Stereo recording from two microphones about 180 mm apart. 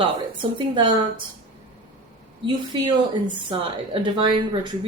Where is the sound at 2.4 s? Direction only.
25° right (ahead or behind).